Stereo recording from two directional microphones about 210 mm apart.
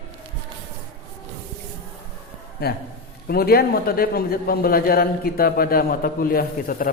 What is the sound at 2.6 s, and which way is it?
A man's voice, 50° left (ahead or behind).